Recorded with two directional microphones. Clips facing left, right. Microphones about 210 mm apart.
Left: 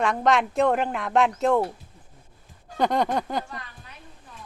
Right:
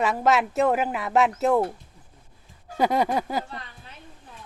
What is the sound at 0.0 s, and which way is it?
Speech, 5° right (ahead or behind).